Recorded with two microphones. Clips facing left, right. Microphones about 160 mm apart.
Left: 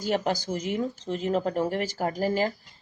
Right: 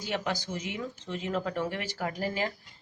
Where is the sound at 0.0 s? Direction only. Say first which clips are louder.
Left 6 dB; 45° left (ahead or behind).